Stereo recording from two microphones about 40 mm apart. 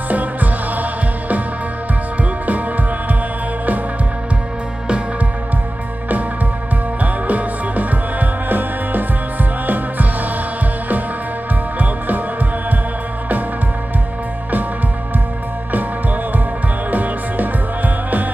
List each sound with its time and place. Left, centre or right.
0.1 s music: right
7.0 s music: right
16.9 s music: right